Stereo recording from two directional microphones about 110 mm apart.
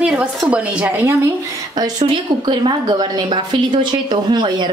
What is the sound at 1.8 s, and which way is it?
Speech, 40° right (ahead or behind).